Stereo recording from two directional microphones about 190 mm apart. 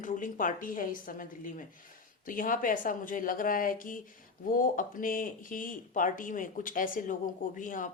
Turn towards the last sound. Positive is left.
turn(degrees=45)  # may be behind; listen again after turning